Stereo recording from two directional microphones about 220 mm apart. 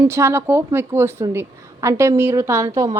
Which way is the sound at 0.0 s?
10° right (ahead or behind).